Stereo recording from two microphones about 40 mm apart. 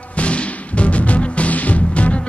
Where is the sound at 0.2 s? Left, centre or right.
Left.